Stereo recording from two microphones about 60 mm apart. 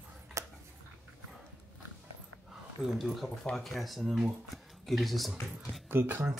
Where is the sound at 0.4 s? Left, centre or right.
Right.